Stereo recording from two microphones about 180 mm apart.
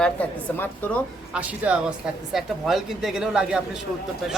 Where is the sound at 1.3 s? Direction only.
10° right (ahead or behind).